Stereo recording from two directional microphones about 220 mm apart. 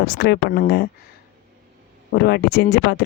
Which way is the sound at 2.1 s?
45° left (ahead or behind).